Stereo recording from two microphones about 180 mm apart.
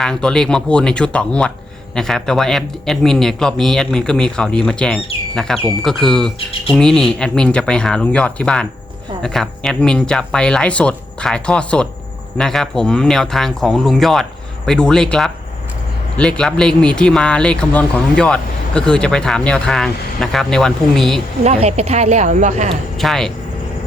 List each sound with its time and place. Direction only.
0.0 s speech: 5° left (ahead or behind)
21.4 s speech: 35° right (ahead or behind)
23.0 s speech: centre (ahead or behind)